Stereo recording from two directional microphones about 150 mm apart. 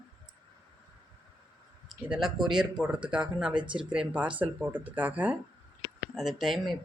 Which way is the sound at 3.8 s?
5° right (ahead or behind).